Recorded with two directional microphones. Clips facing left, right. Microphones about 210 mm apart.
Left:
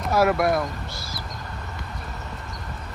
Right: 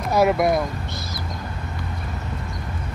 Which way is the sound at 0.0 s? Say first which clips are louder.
Right 2 dB; 5° left (ahead or behind).